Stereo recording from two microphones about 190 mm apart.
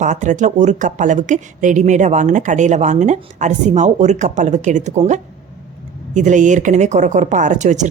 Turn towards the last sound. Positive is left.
turn(degrees=-40)  # may be behind; listen again after turning